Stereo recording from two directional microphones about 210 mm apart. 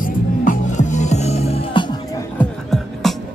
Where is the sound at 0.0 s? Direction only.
35° left (ahead or behind); by 2.2 s 20° left (ahead or behind).